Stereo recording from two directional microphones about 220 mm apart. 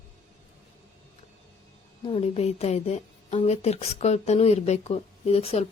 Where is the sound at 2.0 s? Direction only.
25° left (ahead or behind).